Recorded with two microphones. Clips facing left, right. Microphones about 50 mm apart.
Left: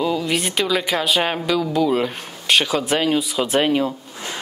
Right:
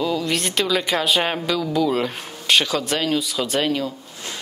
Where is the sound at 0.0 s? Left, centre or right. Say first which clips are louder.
Left 1 dB; centre.